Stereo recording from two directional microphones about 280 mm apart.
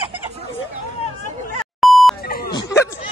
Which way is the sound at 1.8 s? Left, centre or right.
Centre.